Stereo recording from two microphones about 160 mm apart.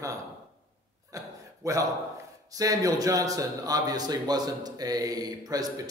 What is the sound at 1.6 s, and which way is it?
Speech, 20° right (ahead or behind).